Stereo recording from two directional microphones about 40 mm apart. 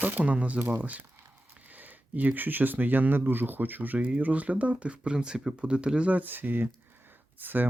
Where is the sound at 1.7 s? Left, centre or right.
Right.